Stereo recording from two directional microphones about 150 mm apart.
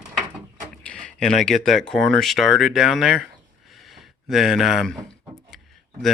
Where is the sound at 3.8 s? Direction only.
Centre (ahead or behind).